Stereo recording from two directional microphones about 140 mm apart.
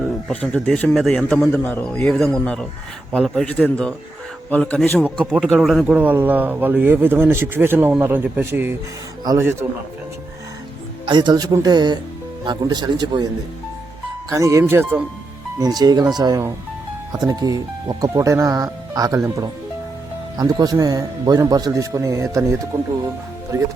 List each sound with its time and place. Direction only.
0.3 s speech: 5° left (ahead or behind); by 9.6 s 15° right (ahead or behind)
11.0 s speech: 30° right (ahead or behind)
14.3 s speech: 20° right (ahead or behind)
15.5 s speech: 30° right (ahead or behind)